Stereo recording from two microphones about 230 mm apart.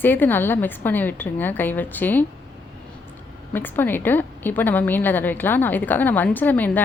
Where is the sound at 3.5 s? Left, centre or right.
Centre.